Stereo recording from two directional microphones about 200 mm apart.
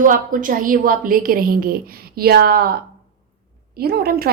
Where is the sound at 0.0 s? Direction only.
40° right (ahead or behind).